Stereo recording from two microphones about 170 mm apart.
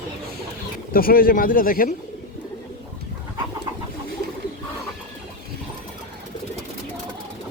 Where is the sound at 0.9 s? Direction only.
60° left (ahead or behind).